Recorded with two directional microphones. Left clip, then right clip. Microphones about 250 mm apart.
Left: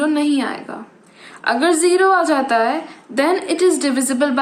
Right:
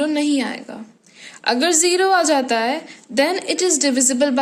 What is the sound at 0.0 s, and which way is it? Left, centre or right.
A woman's voice, right.